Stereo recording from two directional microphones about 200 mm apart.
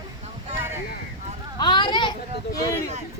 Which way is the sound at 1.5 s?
20° left (ahead or behind).